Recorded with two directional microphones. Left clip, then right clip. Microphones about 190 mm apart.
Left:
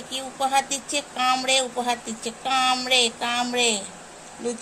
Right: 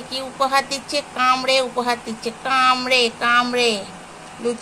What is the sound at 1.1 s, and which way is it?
Speech, 10° left (ahead or behind).